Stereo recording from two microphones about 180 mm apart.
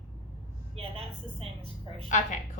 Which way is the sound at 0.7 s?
35° right (ahead or behind).